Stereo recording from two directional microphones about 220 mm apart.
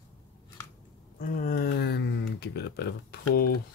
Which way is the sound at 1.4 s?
45° left (ahead or behind).